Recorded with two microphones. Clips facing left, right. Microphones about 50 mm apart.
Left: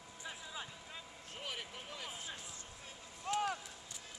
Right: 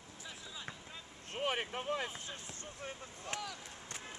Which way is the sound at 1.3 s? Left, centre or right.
Right.